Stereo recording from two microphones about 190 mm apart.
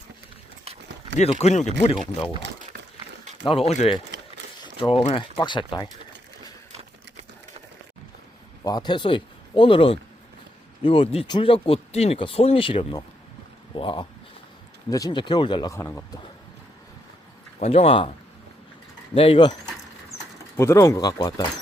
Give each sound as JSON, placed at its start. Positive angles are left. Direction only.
{"t": 1.1, "sound": "speech", "side_deg": 35}
{"t": 3.4, "sound": "speech", "side_deg": 30}
{"t": 8.6, "sound": "speech", "side_deg": 20}
{"t": 17.6, "sound": "speech", "side_deg": 35}
{"t": 19.1, "sound": "speech", "side_deg": 30}
{"t": 20.6, "sound": "speech", "side_deg": 15}